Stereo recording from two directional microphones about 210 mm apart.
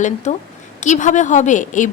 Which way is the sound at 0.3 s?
35° left (ahead or behind).